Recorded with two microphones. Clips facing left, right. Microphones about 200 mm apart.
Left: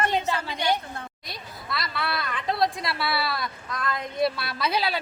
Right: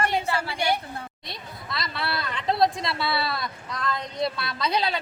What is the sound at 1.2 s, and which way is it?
Speech, 25° right (ahead or behind).